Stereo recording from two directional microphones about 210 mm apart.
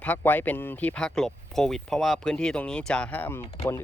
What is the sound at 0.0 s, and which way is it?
Speech, 10° left (ahead or behind).